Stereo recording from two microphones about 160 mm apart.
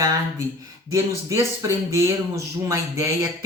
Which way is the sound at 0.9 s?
20° right (ahead or behind).